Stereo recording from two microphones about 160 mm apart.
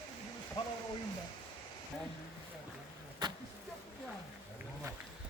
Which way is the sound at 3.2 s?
25° right (ahead or behind).